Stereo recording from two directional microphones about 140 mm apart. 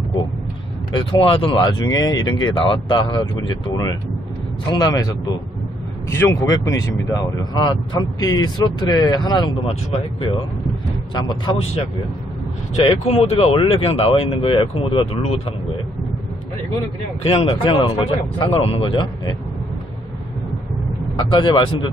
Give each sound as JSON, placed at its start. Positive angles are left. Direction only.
{"t": 0.9, "sound": "speech", "side_deg": 40}
{"t": 11.1, "sound": "speech", "side_deg": 30}
{"t": 12.8, "sound": "speech", "side_deg": 45}
{"t": 17.2, "sound": "speech", "side_deg": 45}
{"t": 21.2, "sound": "speech", "side_deg": 35}